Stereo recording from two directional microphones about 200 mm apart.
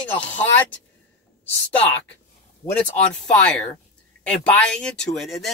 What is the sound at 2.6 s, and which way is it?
Speech, 20° left (ahead or behind).